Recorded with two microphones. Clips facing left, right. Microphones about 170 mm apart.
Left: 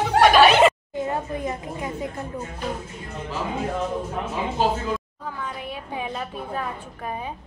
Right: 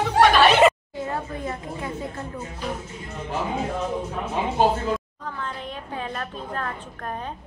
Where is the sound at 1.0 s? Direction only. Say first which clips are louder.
Left 3 dB; 20° left (ahead or behind).